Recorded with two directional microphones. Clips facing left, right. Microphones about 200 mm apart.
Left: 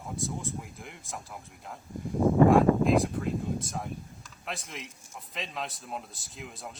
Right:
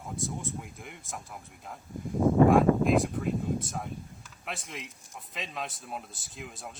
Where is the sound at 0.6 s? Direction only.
Centre (ahead or behind).